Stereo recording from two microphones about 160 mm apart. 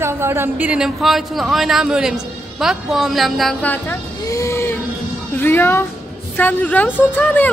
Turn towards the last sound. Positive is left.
turn(degrees=10)  # may be behind; listen again after turning